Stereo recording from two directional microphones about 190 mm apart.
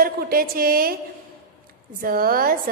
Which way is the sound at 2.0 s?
50° right (ahead or behind).